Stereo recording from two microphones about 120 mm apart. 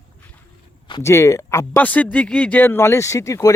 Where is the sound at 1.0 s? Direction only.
25° left (ahead or behind).